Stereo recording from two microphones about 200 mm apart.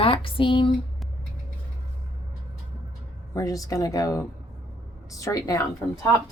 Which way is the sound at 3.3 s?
15° left (ahead or behind).